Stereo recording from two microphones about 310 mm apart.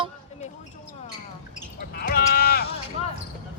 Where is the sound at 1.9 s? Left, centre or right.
Left.